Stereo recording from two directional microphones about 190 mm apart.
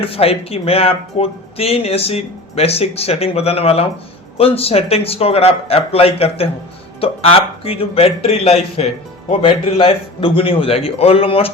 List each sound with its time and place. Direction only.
0.0 s a man's voice: 30° left (ahead or behind)